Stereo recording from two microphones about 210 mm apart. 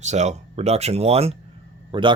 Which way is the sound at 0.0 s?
35° right (ahead or behind).